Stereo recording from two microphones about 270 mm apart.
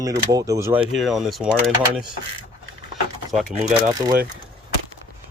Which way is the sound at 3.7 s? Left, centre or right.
Centre.